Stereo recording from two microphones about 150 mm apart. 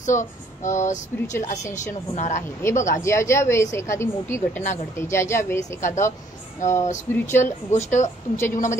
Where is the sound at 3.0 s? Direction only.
20° left (ahead or behind).